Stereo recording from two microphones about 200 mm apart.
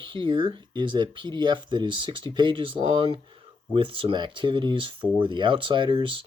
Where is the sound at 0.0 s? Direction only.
25° right (ahead or behind).